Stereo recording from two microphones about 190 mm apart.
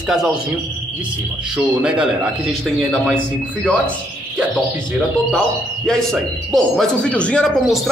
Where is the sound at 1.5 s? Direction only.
5° right (ahead or behind).